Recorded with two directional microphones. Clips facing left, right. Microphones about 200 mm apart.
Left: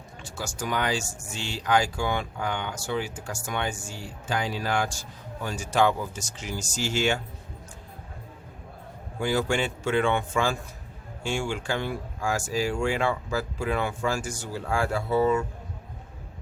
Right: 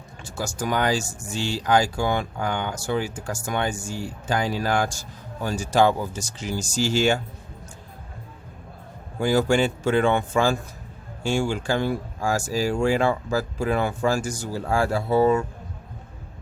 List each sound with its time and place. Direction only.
0.3 s speech: 45° right (ahead or behind)
9.2 s speech: 40° right (ahead or behind)